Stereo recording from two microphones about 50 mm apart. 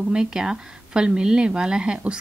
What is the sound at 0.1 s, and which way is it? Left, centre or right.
Speech, centre.